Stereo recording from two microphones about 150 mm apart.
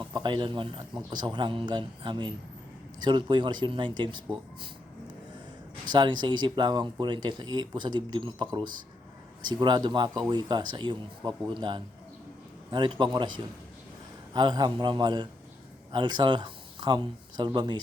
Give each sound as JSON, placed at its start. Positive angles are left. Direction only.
{"t": 0.0, "sound": "speech", "side_deg": -30}
{"t": 5.9, "sound": "speech", "side_deg": -30}